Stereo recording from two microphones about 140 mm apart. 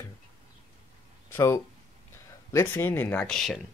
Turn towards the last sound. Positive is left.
turn(degrees=0)  # may be behind; listen again after turning